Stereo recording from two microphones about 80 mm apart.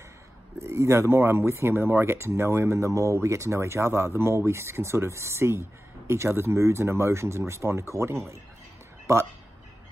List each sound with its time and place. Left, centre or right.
0.6 s speech: right